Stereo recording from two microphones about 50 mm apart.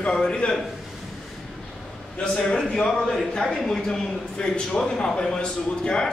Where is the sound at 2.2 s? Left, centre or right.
Centre.